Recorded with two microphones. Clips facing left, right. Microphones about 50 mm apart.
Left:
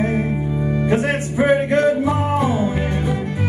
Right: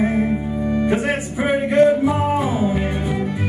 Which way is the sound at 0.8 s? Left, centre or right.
Centre.